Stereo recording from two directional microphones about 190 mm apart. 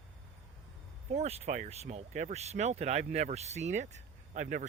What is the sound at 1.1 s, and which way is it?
Speech, 35° right (ahead or behind).